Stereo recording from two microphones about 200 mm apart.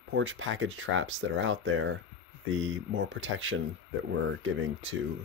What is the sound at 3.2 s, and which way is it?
Speech, 80° right.